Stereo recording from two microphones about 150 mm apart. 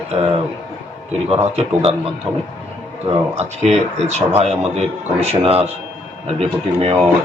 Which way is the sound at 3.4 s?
45° right (ahead or behind).